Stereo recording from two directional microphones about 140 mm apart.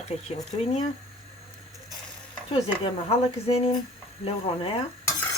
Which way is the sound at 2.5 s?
45° left (ahead or behind).